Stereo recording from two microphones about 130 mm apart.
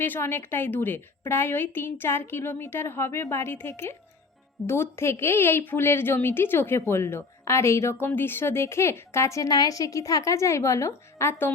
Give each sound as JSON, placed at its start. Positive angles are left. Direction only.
{"t": 0.0, "sound": "a woman's voice", "side_deg": 15}